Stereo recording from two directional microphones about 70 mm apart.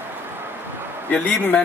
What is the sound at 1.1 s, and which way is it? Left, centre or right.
Speech, left.